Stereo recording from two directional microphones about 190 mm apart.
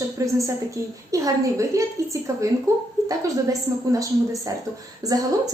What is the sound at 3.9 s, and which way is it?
A woman's voice, 15° right (ahead or behind).